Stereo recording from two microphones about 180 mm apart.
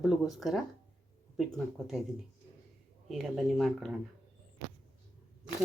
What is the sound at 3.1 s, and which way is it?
Speech, centre (ahead or behind).